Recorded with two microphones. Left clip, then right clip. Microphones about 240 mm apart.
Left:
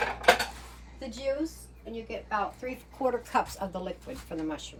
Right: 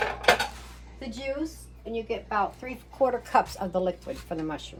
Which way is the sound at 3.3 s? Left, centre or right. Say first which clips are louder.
Right 5 dB; right.